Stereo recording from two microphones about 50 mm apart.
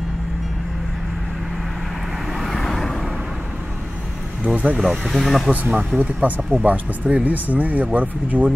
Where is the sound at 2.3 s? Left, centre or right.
Centre.